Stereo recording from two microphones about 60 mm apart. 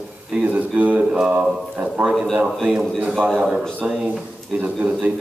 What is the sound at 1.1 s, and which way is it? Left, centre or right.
Speech, centre.